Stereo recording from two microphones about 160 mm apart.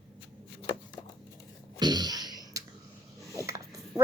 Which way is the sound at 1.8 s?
25° right (ahead or behind).